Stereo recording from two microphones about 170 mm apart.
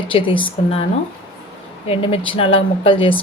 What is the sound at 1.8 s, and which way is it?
Speech, 35° left (ahead or behind).